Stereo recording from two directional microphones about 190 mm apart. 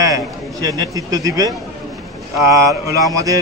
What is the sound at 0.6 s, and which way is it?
Speech, 20° right (ahead or behind).